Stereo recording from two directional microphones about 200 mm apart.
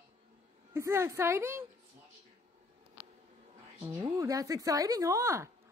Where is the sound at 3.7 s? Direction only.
15° right (ahead or behind).